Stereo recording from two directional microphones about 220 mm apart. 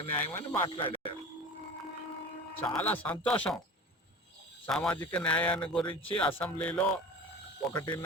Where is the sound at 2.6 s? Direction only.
5° left (ahead or behind).